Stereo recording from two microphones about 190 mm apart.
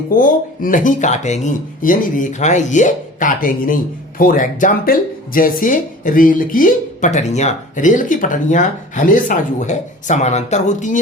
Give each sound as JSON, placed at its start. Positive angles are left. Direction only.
{"t": 0.1, "sound": "speech", "side_deg": 45}